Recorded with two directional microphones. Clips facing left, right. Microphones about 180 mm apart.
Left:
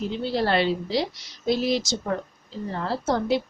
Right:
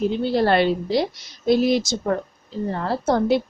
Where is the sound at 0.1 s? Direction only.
55° right (ahead or behind).